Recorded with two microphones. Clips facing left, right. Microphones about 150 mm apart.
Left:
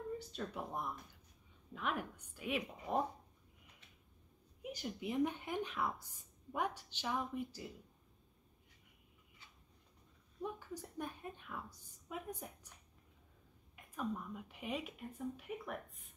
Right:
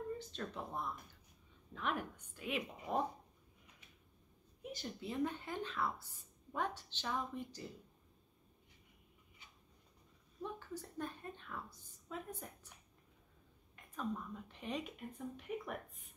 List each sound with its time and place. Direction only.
0.3 s a woman's voice: 10° left (ahead or behind)
4.7 s a woman's voice: 15° left (ahead or behind)
10.4 s a woman's voice: 10° left (ahead or behind)
13.7 s speech: 10° left (ahead or behind)